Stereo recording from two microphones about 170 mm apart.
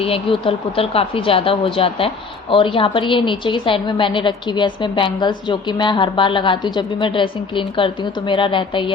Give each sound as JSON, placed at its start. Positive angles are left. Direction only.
{"t": 0.0, "sound": "a woman's voice", "side_deg": 35}